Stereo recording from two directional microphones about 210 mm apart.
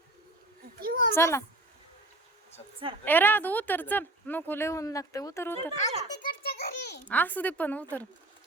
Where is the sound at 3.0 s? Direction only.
10° left (ahead or behind).